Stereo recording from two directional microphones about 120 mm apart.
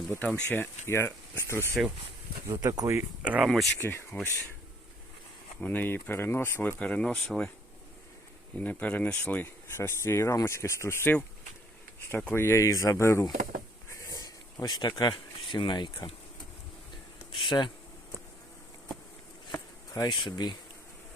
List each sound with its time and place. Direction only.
0.1 s speech: 10° left (ahead or behind)
2.5 s speech: 30° right (ahead or behind)
3.2 s speech: 10° right (ahead or behind)
3.8 s speech: 15° left (ahead or behind)
5.5 s speech: 15° left (ahead or behind)
8.5 s speech: 10° left (ahead or behind)
13.9 s a sound: 25° left (ahead or behind)
17.3 s speech: 40° left (ahead or behind)
19.9 s speech: 30° left (ahead or behind)